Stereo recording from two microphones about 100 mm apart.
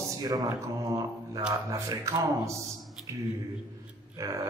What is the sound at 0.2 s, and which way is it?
Speech, 40° right (ahead or behind).